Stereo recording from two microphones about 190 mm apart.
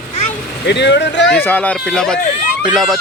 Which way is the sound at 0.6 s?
65° left (ahead or behind).